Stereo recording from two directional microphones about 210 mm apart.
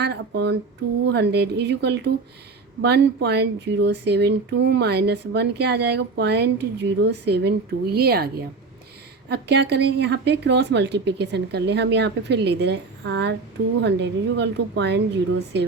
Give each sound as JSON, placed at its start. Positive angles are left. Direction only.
{"t": 0.0, "sound": "speech", "side_deg": -55}